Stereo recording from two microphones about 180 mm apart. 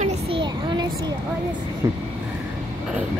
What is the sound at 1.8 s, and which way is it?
Vehicle, 20° right (ahead or behind).